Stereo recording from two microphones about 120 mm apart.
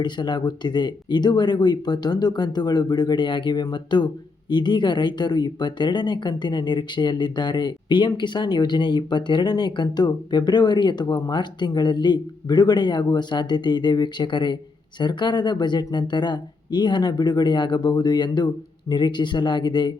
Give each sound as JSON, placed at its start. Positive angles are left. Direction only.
{"t": 0.0, "sound": "speech", "side_deg": 40}